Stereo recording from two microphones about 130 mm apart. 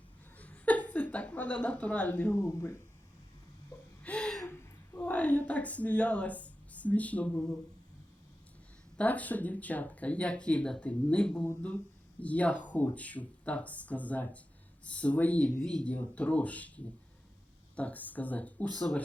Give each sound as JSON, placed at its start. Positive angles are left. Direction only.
{"t": 0.3, "sound": "a sound", "side_deg": 10}
{"t": 2.4, "sound": "speech", "side_deg": 20}
{"t": 4.0, "sound": "gasp", "side_deg": 10}
{"t": 4.4, "sound": "a woman's voice", "side_deg": 15}
{"t": 9.0, "sound": "speech", "side_deg": 10}